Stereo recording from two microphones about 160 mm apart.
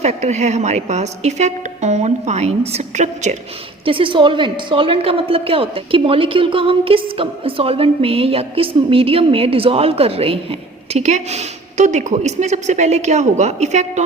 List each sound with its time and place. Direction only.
0.0 s a woman's voice: 45° right (ahead or behind)
3.8 s a woman's voice: 35° right (ahead or behind)